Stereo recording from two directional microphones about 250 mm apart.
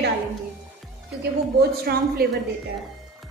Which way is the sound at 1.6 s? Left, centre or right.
Right.